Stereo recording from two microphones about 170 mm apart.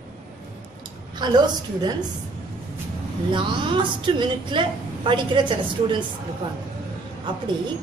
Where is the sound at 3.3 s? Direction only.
30° right (ahead or behind).